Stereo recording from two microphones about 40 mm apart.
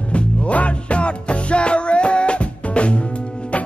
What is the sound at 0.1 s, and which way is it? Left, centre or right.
Music, left.